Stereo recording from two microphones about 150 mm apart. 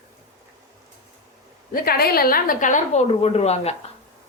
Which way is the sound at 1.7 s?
80° left.